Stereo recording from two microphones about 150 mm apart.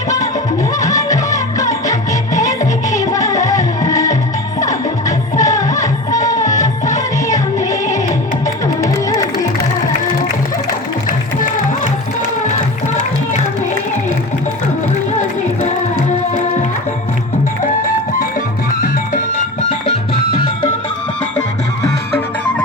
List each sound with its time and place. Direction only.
0.8 s music: 25° left (ahead or behind)
3.0 s music: 25° left (ahead or behind)
6.6 s music: 55° left (ahead or behind)
8.8 s music: 20° left (ahead or behind)